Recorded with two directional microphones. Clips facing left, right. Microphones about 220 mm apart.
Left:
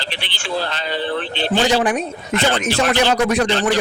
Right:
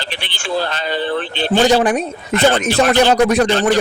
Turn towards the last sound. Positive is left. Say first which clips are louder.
# right 3 dB
turn(degrees=-45)  # may be behind; listen again after turning